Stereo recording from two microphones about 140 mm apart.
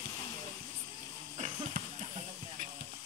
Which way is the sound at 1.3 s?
55° right (ahead or behind).